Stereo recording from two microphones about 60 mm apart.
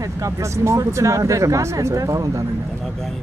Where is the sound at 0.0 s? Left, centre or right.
Right.